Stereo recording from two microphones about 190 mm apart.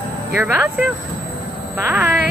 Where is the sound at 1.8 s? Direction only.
10° right (ahead or behind).